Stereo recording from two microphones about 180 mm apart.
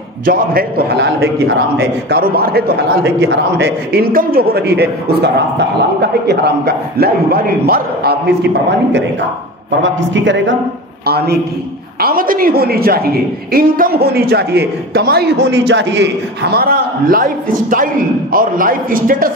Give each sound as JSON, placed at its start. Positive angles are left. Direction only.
{"t": 0.2, "sound": "a man's voice", "side_deg": -55}
{"t": 9.8, "sound": "a man's voice", "side_deg": -90}
{"t": 11.1, "sound": "a man's voice", "side_deg": -60}